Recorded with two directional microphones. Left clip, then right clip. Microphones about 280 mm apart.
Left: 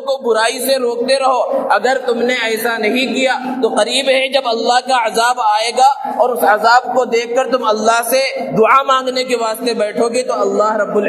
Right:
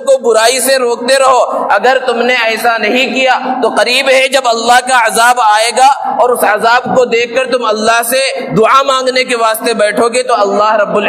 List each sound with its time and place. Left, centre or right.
0.1 s a man's voice: right